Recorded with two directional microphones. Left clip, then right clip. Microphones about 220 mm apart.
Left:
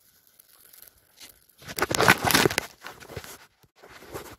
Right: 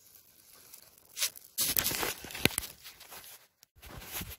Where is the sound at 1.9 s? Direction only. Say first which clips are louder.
Left 12 dB; 15° left (ahead or behind).